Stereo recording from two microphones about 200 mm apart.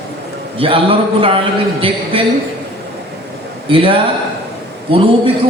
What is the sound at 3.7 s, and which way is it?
A man's voice, 25° right (ahead or behind).